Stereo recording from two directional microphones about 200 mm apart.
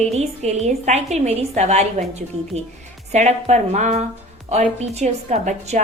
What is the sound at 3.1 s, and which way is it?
A woman's voice, 35° right (ahead or behind).